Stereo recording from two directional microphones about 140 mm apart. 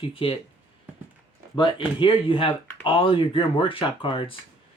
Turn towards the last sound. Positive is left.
turn(degrees=40)  # may be behind; listen again after turning